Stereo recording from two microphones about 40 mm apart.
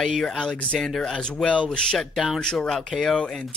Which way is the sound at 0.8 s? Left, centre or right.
Centre.